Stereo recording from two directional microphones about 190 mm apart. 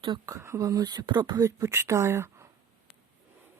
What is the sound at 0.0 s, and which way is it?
Speech, 20° right (ahead or behind).